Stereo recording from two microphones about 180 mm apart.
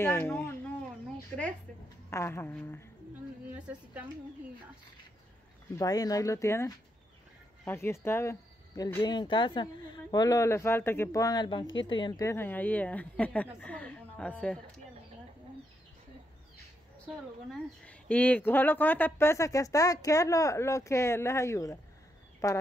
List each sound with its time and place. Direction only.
0.0 s speech: 10° left (ahead or behind)
2.0 s speech: 15° left (ahead or behind)
3.5 s a woman's voice: 10° right (ahead or behind)
5.8 s speech: 20° left (ahead or behind)
17.5 s speech: 5° left (ahead or behind)